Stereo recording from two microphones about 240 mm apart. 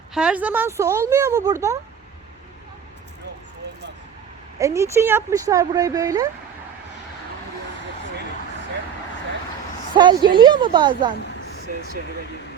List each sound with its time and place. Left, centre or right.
0.1 s speech: centre
4.6 s speech: centre
9.9 s a woman's voice: centre